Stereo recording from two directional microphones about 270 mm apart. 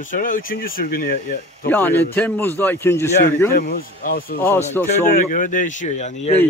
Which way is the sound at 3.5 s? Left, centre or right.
Left.